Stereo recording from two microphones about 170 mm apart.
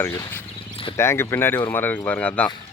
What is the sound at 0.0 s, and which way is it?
Speech, 15° left (ahead or behind).